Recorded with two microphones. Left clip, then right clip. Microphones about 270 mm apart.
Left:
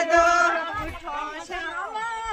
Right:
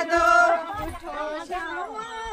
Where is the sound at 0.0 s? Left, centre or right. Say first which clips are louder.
Even; centre.